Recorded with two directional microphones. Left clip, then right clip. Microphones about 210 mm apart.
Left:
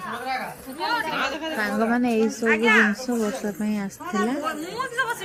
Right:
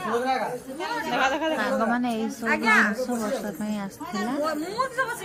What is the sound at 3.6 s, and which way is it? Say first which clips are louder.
Speech: left 3 dB; 15° left (ahead or behind).